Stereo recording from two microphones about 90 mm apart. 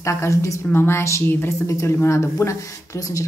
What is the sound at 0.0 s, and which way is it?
A woman's voice, 35° left (ahead or behind).